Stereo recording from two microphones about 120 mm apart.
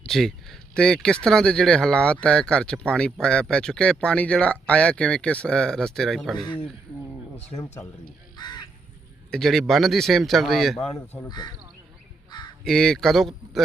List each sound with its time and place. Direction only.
0.0 s speech: centre (ahead or behind)
8.4 s crow: 35° left (ahead or behind)
9.3 s a man's voice: centre (ahead or behind)
11.3 s speech: 35° left (ahead or behind)
12.6 s a man's voice: 5° left (ahead or behind)